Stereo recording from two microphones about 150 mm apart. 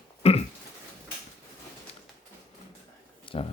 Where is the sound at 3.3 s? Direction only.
35° left (ahead or behind).